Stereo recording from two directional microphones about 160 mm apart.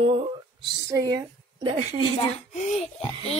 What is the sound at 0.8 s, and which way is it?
Speech, 20° right (ahead or behind).